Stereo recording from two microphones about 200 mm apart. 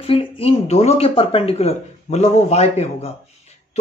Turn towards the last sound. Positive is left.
turn(degrees=30)  # may be behind; listen again after turning